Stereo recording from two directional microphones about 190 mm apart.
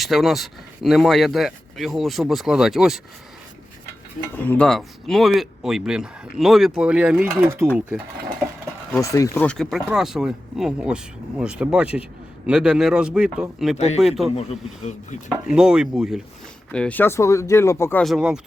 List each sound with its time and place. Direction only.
0.0 s speech: centre (ahead or behind)
4.4 s speech: 10° left (ahead or behind); by 7.7 s 15° right (ahead or behind)
8.9 s speech: 15° left (ahead or behind); by 13.7 s centre (ahead or behind)
13.7 s speech: 35° left (ahead or behind)
14.0 s speech: centre (ahead or behind)
14.3 s speech: 35° left (ahead or behind)
15.5 s speech: 5° right (ahead or behind); by 18.0 s 15° left (ahead or behind)
18.0 s speech: centre (ahead or behind)